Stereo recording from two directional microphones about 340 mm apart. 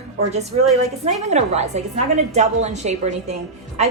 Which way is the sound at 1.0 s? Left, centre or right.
Centre.